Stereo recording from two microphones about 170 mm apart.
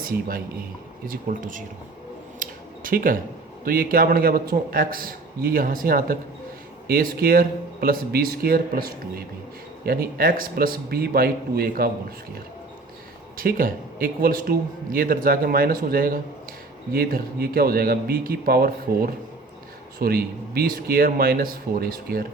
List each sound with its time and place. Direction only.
0.0 s speech: 55° right (ahead or behind)
2.4 s a sound: 55° right (ahead or behind)
3.6 s a man's voice: 55° right (ahead or behind)
13.3 s a man's voice: 60° right (ahead or behind)